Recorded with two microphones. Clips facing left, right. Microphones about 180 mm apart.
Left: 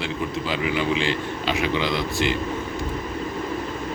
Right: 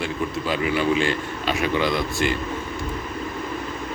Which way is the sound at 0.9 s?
50° right (ahead or behind).